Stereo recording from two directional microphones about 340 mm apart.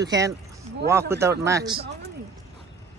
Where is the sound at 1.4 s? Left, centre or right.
Centre.